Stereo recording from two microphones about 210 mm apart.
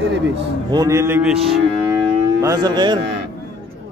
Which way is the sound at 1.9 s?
15° right (ahead or behind).